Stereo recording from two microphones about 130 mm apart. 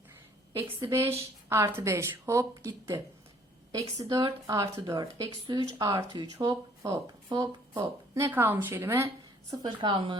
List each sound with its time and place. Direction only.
0.9 s speech: 20° right (ahead or behind)
9.5 s a woman's voice: 35° right (ahead or behind)